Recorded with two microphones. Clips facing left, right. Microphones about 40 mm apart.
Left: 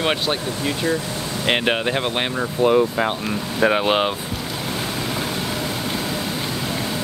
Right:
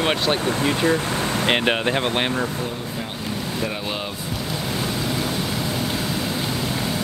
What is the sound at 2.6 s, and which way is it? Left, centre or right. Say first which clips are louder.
Speech: left 12 dB; left.